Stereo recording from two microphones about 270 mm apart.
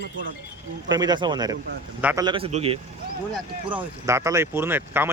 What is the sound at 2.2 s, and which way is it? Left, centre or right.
Speech, centre.